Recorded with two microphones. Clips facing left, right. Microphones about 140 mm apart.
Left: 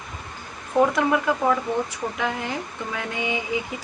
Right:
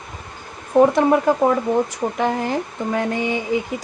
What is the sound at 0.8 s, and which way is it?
Speech, 35° right (ahead or behind).